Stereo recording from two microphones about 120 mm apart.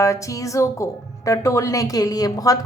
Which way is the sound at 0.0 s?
25° left (ahead or behind).